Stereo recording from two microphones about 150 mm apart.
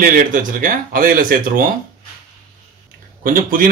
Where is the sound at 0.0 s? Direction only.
65° right (ahead or behind).